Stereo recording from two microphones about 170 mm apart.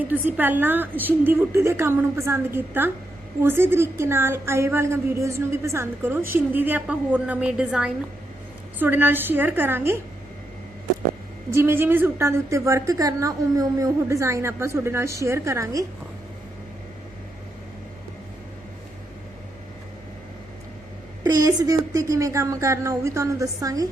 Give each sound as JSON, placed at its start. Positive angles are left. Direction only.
{"t": 0.0, "sound": "a woman's voice", "side_deg": -10}
{"t": 11.5, "sound": "a woman's voice", "side_deg": -15}
{"t": 21.2, "sound": "a woman's voice", "side_deg": -20}